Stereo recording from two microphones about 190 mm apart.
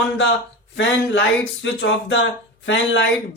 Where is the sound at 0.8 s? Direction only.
75° left (ahead or behind).